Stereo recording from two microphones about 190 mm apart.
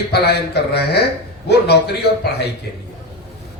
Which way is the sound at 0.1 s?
60° left (ahead or behind).